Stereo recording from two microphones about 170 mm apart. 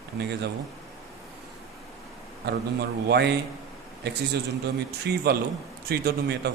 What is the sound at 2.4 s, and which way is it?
Speech, 75° right (ahead or behind).